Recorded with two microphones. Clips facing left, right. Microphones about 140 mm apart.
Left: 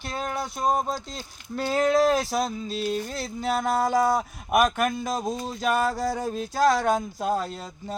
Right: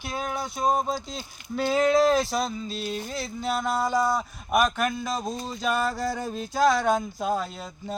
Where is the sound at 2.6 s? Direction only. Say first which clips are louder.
Left 4 dB; 40° left (ahead or behind).